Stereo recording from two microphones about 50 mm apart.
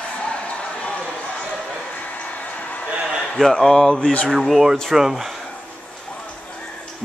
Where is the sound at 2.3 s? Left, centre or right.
Left.